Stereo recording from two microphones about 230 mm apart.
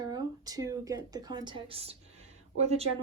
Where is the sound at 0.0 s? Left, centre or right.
Centre.